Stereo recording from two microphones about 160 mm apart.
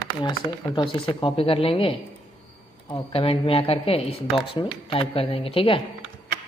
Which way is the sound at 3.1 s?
35° left (ahead or behind).